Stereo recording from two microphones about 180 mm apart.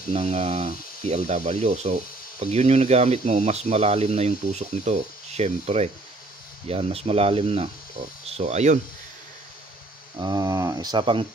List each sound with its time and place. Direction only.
0.1 s speech: 35° right (ahead or behind)
10.1 s speech: 25° right (ahead or behind)